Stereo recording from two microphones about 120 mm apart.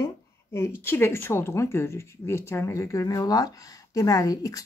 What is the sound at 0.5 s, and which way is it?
Speech, 20° left (ahead or behind).